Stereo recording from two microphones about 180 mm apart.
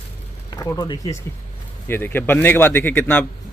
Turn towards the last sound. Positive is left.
turn(degrees=10)  # may be behind; listen again after turning